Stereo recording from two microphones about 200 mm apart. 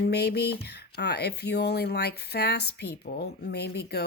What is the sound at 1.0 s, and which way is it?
Speech, 55° left (ahead or behind).